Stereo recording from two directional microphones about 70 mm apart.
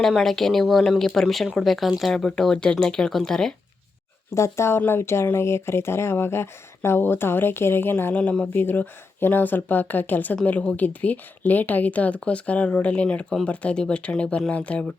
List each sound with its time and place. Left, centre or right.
0.1 s speech: centre
4.4 s speech: left
8.2 s speech: centre
8.5 s speech: left